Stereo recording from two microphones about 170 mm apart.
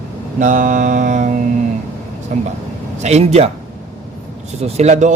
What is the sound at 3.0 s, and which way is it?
Speech, 40° right (ahead or behind).